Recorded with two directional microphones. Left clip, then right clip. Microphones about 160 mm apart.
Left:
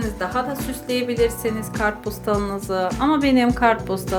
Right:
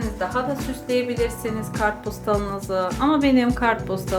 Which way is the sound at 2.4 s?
30° left (ahead or behind).